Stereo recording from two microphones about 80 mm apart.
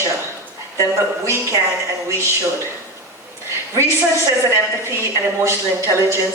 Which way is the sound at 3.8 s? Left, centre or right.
Right.